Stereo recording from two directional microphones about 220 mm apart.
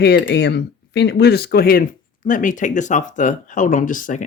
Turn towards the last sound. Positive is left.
turn(degrees=35)  # may be behind; listen again after turning